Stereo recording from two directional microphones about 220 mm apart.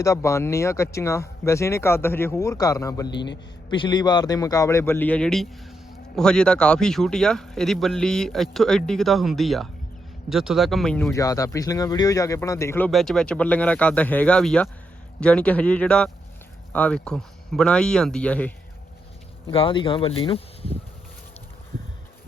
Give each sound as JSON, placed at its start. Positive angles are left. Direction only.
{"t": 0.0, "sound": "speech", "side_deg": 15}
{"t": 3.1, "sound": "a man's voice", "side_deg": 50}
{"t": 3.7, "sound": "speech", "side_deg": 20}
{"t": 11.1, "sound": "speech", "side_deg": 15}
{"t": 19.5, "sound": "speech", "side_deg": 25}